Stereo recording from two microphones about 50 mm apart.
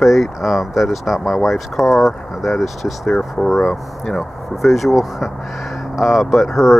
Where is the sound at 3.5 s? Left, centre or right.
Centre.